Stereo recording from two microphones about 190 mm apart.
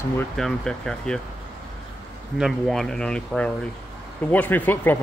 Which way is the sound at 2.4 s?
Centre (ahead or behind).